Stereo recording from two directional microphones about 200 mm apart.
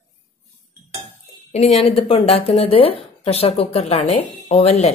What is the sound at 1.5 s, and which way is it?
Speech, 30° left (ahead or behind).